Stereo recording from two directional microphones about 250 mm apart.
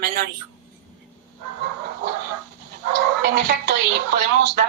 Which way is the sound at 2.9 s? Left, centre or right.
Right.